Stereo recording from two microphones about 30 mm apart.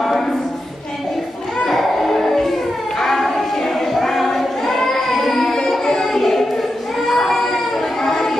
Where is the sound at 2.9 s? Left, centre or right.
Centre.